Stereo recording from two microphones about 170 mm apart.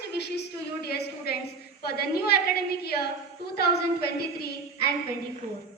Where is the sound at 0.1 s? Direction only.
75° left (ahead or behind).